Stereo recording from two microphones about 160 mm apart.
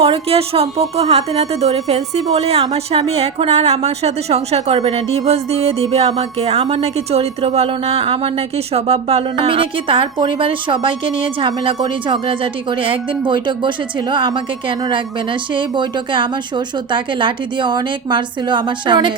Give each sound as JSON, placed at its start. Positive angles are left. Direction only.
{"t": 0.0, "sound": "speech", "side_deg": -40}